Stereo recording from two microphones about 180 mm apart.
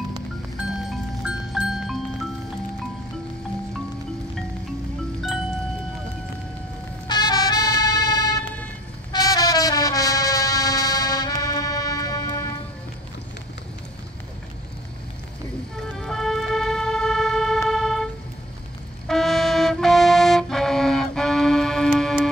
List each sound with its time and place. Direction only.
0.6 s music: 5° right (ahead or behind)
7.1 s music: 20° left (ahead or behind)
16.0 s vehicle: centre (ahead or behind)
17.6 s music: centre (ahead or behind)
19.0 s brass instrument: centre (ahead or behind)